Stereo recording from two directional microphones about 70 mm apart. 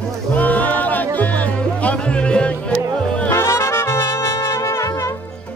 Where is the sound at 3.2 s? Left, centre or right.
Left.